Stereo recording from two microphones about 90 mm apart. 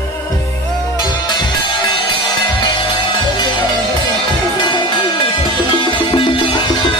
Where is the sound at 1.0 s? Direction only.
55° left (ahead or behind).